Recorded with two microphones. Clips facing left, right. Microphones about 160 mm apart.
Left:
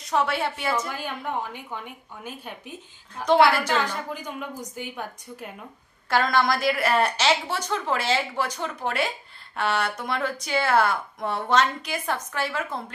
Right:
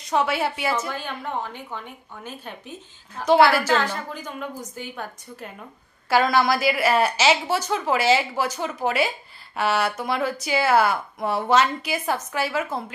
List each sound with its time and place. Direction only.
0.1 s speech: 5° right (ahead or behind)
0.9 s a woman's voice: 10° left (ahead or behind)
3.3 s speech: 5° right (ahead or behind)
3.7 s a woman's voice: 10° left (ahead or behind)
6.0 s speech: 5° right (ahead or behind)